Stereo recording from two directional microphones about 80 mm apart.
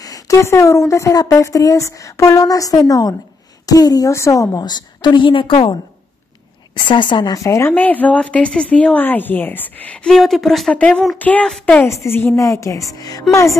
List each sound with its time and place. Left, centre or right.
0.0 s a woman's voice: left
4.6 s a woman's voice: left
6.7 s a woman's voice: left
7.3 s a woman's voice: left
7.7 s a woman's voice: left
10.0 s speech: centre
10.7 s a woman's voice: centre
11.8 s a woman's voice: left